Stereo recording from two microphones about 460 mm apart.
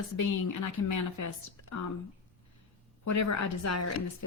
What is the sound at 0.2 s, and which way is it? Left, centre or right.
A woman's voice, left.